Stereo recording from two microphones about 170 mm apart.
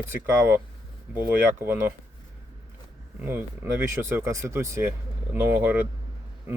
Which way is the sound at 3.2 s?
15° right (ahead or behind).